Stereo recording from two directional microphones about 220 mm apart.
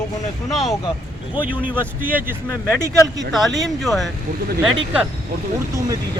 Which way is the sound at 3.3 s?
Centre (ahead or behind).